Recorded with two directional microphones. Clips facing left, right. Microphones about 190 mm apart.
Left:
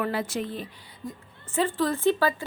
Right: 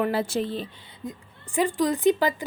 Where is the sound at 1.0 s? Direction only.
20° right (ahead or behind).